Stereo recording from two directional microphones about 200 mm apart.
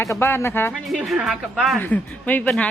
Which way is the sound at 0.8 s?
Centre (ahead or behind).